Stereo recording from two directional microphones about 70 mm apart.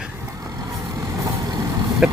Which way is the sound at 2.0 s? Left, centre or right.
Centre.